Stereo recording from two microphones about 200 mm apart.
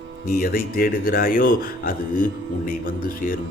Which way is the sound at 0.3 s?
45° left (ahead or behind).